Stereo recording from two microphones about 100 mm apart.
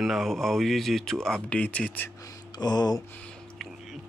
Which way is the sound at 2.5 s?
45° left (ahead or behind).